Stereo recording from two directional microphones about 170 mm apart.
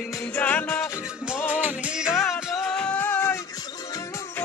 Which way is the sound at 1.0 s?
5° right (ahead or behind).